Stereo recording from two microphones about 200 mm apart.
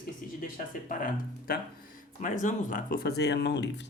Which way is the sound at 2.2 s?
40° left (ahead or behind).